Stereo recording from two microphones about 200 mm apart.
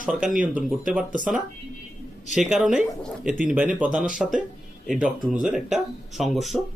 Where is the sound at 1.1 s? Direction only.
40° right (ahead or behind).